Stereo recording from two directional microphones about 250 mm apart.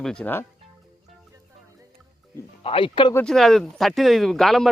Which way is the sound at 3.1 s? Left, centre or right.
Centre.